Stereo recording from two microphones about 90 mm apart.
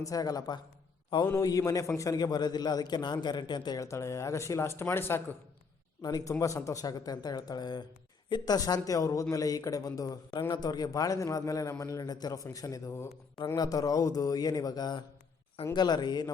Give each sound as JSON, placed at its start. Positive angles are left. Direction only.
{"t": 0.0, "sound": "a man's voice", "side_deg": 40}
{"t": 3.8, "sound": "a man's voice", "side_deg": 35}
{"t": 6.0, "sound": "a man's voice", "side_deg": 45}
{"t": 6.4, "sound": "a man's voice", "side_deg": 35}